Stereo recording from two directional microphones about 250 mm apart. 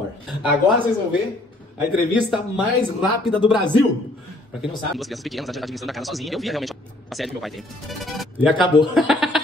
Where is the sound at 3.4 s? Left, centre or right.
Centre.